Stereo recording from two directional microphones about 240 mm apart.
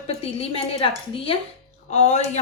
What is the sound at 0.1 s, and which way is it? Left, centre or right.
A woman's voice, left.